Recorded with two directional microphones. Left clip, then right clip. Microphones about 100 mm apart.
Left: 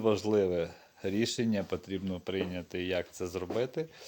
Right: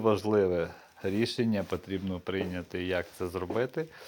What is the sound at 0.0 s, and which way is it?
Speech, 15° left (ahead or behind).